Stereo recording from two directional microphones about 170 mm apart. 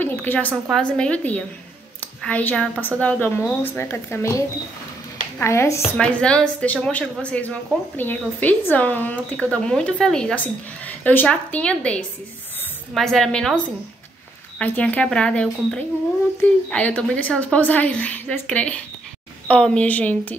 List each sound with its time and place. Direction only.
0.0 s a sound: 10° left (ahead or behind)
0.5 s speech: centre (ahead or behind)
14.6 s speech: 10° left (ahead or behind)